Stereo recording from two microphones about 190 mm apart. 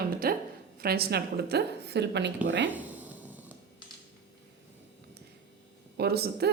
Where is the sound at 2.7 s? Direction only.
10° right (ahead or behind).